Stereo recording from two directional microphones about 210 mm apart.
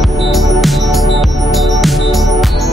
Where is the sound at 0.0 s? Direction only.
Centre (ahead or behind).